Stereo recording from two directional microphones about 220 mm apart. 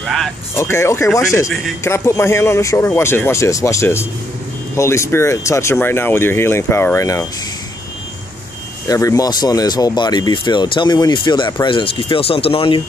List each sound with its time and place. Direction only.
0.0 s speech: centre (ahead or behind)
8.8 s speech: 15° left (ahead or behind)